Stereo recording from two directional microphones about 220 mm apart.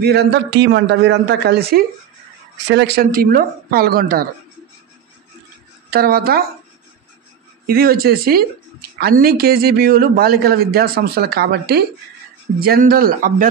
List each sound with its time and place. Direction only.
0.0 s a man's voice: 45° right (ahead or behind)
2.7 s a man's voice: 45° right (ahead or behind)
5.9 s a woman's voice: 45° right (ahead or behind)
7.6 s a man's voice: 45° right (ahead or behind)